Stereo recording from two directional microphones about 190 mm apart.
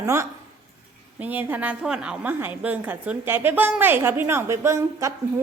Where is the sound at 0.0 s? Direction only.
15° right (ahead or behind).